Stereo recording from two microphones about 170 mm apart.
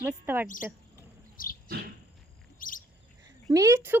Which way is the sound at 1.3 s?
55° left (ahead or behind).